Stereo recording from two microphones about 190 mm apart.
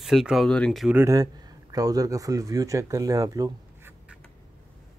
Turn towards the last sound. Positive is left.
turn(degrees=-15)  # may be behind; listen again after turning